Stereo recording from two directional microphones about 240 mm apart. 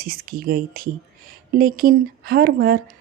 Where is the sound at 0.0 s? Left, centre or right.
Right.